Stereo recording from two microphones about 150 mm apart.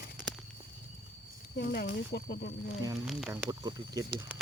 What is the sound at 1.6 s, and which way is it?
Speech, 90° left.